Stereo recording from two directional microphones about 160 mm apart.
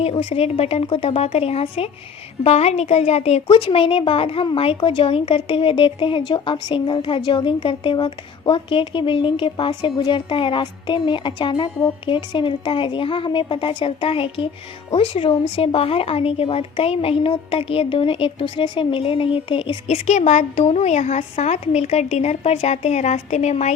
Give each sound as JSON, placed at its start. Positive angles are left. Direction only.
{"t": 0.0, "sound": "speech", "side_deg": 40}